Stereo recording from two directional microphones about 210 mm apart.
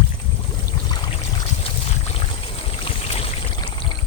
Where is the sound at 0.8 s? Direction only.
20° left (ahead or behind).